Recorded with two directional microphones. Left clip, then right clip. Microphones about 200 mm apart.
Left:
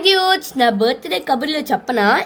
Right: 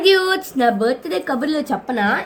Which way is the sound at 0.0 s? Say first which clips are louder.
Left 1 dB; 30° left (ahead or behind).